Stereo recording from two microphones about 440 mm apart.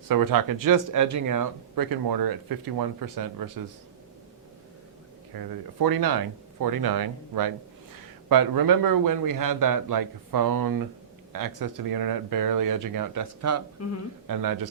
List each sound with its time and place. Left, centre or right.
0.1 s speech: right
5.4 s speech: right
13.8 s speech: left
14.3 s speech: right